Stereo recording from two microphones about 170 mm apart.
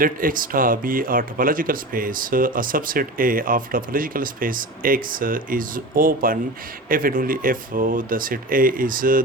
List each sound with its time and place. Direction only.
0.0 s speech: 55° right (ahead or behind)